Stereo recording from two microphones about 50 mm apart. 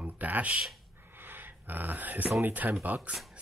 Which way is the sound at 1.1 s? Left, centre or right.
Right.